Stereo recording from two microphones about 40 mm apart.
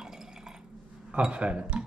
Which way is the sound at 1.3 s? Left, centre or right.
Right.